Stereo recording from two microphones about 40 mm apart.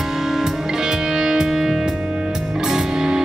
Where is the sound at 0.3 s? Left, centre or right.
Centre.